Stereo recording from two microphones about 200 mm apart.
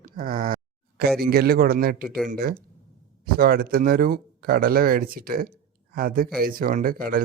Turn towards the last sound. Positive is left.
turn(degrees=-45)  # may be behind; listen again after turning